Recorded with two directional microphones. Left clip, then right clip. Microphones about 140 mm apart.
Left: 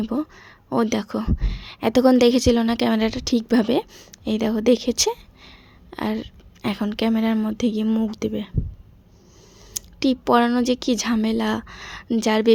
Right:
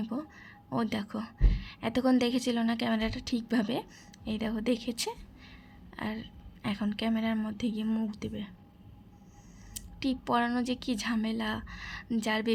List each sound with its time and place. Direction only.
0.0 s speech: 40° left (ahead or behind)
9.7 s speech: 50° left (ahead or behind)